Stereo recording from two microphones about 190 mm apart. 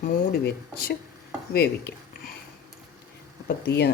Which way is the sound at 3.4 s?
60° left (ahead or behind).